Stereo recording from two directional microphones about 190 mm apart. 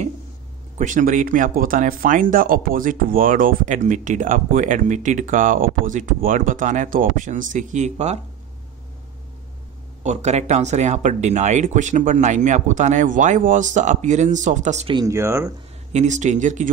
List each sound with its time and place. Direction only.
0.7 s speech: 45° right (ahead or behind)
10.0 s speech: 35° right (ahead or behind)
15.0 s speech: 15° right (ahead or behind)
15.9 s speech: 40° right (ahead or behind)